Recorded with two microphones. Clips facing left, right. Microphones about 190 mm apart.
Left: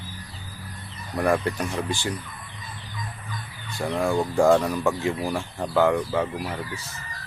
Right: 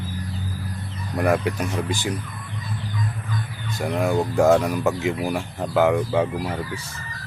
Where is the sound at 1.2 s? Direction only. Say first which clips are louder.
Right 2 dB; 15° right (ahead or behind).